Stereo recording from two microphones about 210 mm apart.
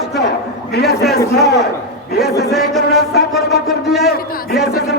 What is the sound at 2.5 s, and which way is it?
Chant, centre (ahead or behind).